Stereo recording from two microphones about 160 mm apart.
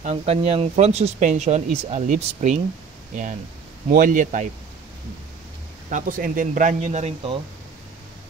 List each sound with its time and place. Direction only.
0.0 s speech: 40° right (ahead or behind)
3.9 s speech: 55° right (ahead or behind)
5.9 s speech: 55° right (ahead or behind)